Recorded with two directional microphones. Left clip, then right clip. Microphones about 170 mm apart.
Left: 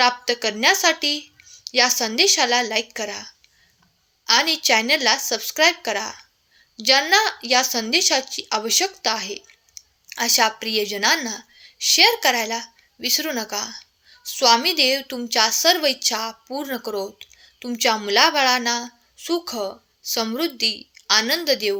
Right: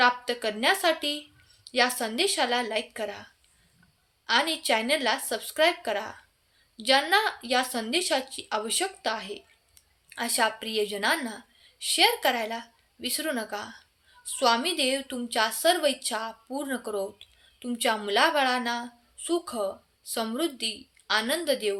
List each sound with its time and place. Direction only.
0.0 s a woman's voice: 35° left (ahead or behind)
4.3 s a woman's voice: 35° left (ahead or behind)